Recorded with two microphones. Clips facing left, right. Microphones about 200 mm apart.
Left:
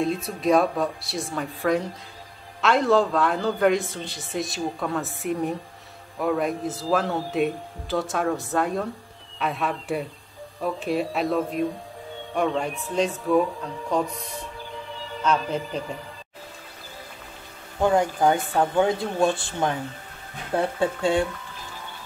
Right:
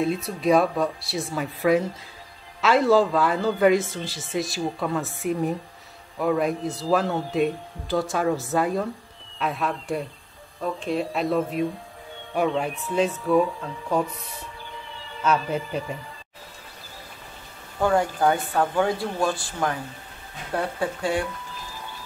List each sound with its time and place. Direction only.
0.0 s a man's voice: centre (ahead or behind)
15.2 s speech: 5° right (ahead or behind)
17.7 s speech: 20° left (ahead or behind)